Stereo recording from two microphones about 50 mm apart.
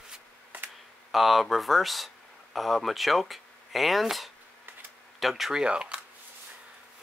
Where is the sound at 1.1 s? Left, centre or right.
Centre.